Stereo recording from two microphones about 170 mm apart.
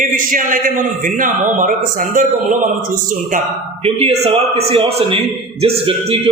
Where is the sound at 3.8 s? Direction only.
35° right (ahead or behind).